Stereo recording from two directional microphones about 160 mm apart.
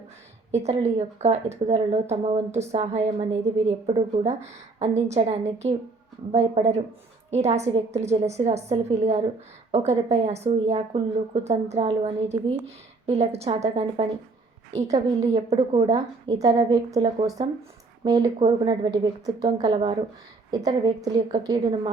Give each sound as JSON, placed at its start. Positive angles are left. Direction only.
{"t": 0.5, "sound": "a woman's voice", "side_deg": -45}
{"t": 15.2, "sound": "a woman's voice", "side_deg": -40}
{"t": 15.9, "sound": "a woman's voice", "side_deg": -25}